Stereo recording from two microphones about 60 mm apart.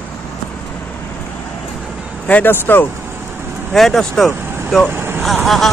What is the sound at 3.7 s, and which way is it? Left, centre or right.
Speech, centre.